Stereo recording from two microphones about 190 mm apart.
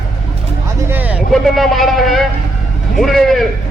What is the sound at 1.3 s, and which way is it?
A man's voice, centre (ahead or behind).